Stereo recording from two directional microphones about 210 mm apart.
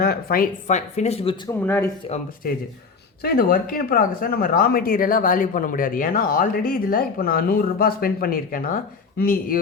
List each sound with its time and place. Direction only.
0.0 s speech: 45° left (ahead or behind); by 1.4 s 30° left (ahead or behind)
1.6 s speech: 10° left (ahead or behind)
2.4 s speech: 45° left (ahead or behind)